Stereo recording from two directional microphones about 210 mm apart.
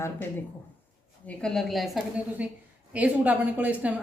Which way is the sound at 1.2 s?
5° left (ahead or behind).